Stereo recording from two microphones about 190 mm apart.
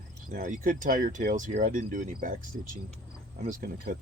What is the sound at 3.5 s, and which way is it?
Speech, 50° right (ahead or behind).